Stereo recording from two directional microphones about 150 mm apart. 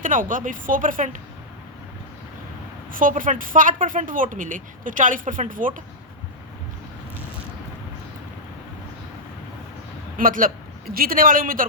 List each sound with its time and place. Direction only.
0.0 s speech: 60° right (ahead or behind)
2.9 s speech: 65° right (ahead or behind)
10.2 s a man's voice: 65° right (ahead or behind)